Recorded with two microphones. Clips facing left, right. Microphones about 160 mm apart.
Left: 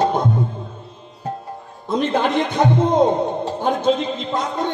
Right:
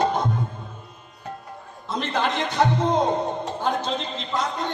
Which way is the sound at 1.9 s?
55° left (ahead or behind).